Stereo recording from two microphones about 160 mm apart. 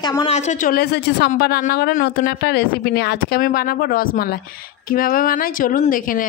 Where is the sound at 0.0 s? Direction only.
25° left (ahead or behind).